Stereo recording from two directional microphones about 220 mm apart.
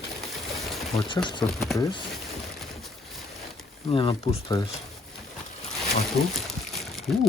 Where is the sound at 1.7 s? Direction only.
15° left (ahead or behind).